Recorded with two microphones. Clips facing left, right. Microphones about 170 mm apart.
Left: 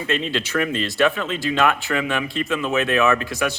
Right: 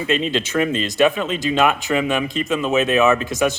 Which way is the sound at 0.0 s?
20° right (ahead or behind).